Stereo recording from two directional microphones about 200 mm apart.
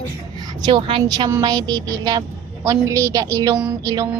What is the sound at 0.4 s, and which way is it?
A woman's voice, 20° right (ahead or behind).